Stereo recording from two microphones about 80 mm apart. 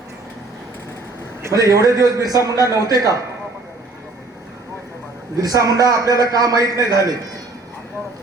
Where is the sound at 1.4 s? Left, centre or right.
Right.